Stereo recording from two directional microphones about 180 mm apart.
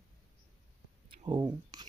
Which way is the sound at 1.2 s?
25° right (ahead or behind).